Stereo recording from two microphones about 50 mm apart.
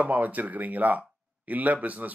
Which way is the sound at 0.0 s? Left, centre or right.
Right.